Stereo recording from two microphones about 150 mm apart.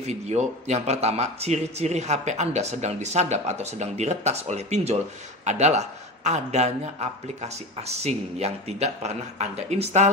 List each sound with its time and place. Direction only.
0.0 s speech: 50° right (ahead or behind)